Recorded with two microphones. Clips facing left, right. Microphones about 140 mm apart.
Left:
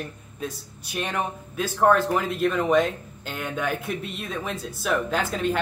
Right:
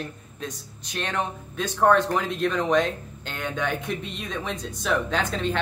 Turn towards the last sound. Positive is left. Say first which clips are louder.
# left 1 dB
turn(degrees=5)  # may be behind; listen again after turning